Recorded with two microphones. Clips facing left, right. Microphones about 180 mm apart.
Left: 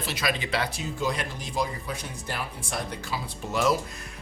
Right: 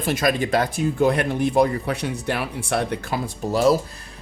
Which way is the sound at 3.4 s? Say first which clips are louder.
Right 7 dB; 35° right (ahead or behind).